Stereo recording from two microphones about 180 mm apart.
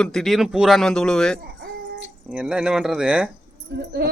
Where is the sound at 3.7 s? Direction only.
60° right (ahead or behind).